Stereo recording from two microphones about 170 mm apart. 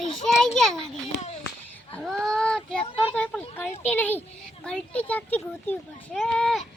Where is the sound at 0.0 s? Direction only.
Centre (ahead or behind).